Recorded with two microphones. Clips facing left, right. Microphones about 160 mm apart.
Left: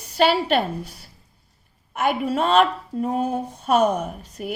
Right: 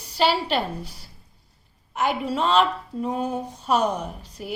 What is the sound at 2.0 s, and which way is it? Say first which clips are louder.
A woman's voice: left 2 dB; 50° left (ahead or behind).